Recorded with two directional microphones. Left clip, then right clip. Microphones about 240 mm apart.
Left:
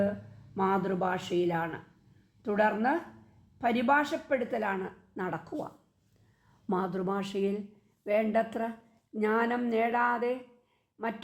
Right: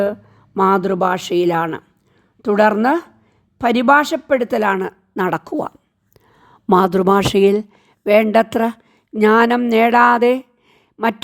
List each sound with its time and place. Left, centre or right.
0.5 s a woman's voice: right